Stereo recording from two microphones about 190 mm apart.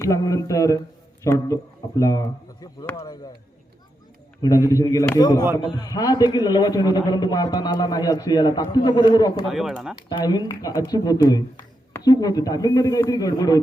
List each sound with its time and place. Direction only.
0.0 s speech: 15° left (ahead or behind)
4.4 s a man's voice: 15° left (ahead or behind)
9.5 s speech: centre (ahead or behind)
10.1 s a man's voice: 20° left (ahead or behind)